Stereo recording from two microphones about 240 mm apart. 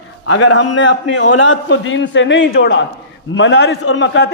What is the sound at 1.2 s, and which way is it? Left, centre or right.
A man's voice, left.